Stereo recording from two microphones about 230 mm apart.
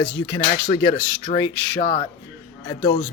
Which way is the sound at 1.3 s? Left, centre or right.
Left.